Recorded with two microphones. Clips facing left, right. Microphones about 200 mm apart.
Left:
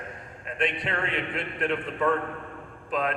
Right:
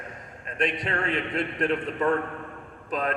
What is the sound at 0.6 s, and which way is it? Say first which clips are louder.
Speech: right 1 dB; 40° right (ahead or behind).